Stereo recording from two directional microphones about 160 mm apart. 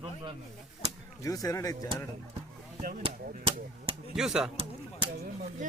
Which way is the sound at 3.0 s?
35° right (ahead or behind).